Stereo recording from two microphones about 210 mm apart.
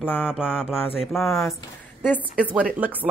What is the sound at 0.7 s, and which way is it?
Speech, centre (ahead or behind).